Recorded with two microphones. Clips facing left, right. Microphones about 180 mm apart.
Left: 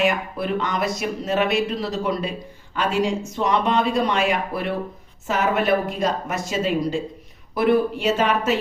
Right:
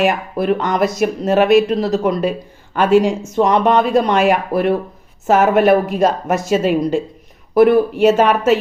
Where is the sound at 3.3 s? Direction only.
50° right (ahead or behind).